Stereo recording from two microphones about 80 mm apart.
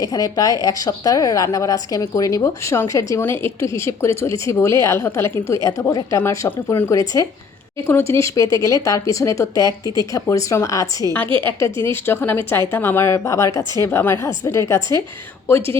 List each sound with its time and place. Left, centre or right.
0.0 s a woman's voice: left
5.9 s a woman's voice: left